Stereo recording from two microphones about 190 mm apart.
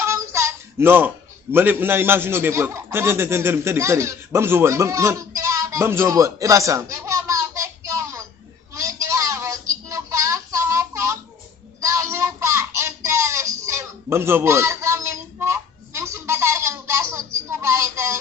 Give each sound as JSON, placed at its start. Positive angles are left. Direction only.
{"t": 0.0, "sound": "child singing", "side_deg": -15}
{"t": 1.5, "sound": "a man's voice", "side_deg": -10}
{"t": 8.7, "sound": "a sound", "side_deg": -15}